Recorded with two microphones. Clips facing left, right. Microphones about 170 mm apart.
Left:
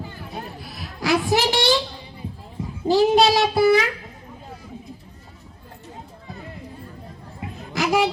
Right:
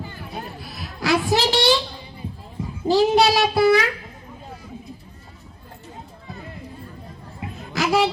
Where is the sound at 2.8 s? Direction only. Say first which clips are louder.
Even; 15° left (ahead or behind).